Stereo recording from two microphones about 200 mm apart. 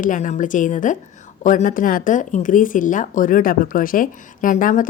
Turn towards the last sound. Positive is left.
turn(degrees=40)  # may be behind; listen again after turning